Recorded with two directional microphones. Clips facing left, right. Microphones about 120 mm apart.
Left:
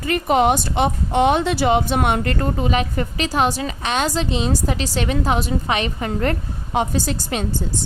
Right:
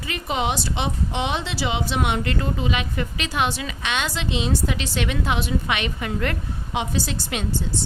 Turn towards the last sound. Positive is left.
turn(degrees=40)  # may be behind; listen again after turning